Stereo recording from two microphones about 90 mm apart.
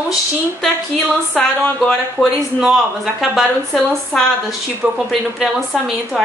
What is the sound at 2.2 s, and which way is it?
Speech, 20° left (ahead or behind).